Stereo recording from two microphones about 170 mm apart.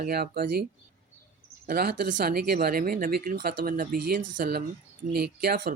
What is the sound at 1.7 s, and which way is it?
Speech, 65° right (ahead or behind).